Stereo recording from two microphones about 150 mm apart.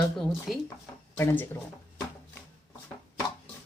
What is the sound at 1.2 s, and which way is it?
Speech, 15° left (ahead or behind).